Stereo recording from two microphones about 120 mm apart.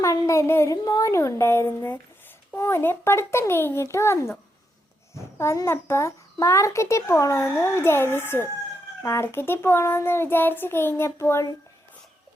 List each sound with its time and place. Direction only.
0.0 s a child's voice: 25° left (ahead or behind)